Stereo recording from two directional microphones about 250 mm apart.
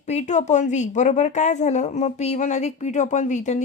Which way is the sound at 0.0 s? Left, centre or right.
Left.